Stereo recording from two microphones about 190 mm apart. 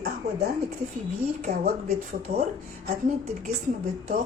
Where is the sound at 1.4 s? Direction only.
50° right (ahead or behind).